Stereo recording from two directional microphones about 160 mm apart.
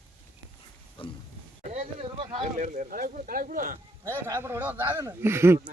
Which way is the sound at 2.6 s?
55° right (ahead or behind).